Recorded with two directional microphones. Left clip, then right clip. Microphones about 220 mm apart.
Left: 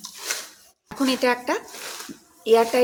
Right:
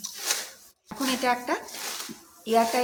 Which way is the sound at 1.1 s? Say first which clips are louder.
Left 3 dB; 35° left (ahead or behind).